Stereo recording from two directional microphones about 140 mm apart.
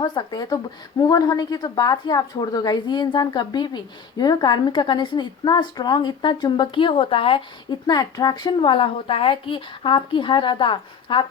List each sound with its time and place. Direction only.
0.0 s a woman's voice: 30° left (ahead or behind)